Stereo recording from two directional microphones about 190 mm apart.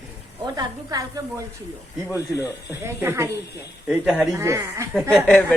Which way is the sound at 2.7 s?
10° right (ahead or behind).